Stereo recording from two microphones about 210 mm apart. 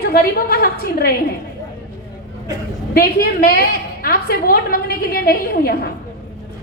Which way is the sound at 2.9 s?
45° left (ahead or behind).